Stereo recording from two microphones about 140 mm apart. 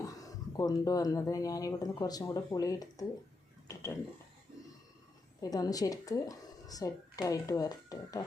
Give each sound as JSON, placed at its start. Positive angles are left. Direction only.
{"t": 0.5, "sound": "speech", "side_deg": 25}
{"t": 5.4, "sound": "speech", "side_deg": 25}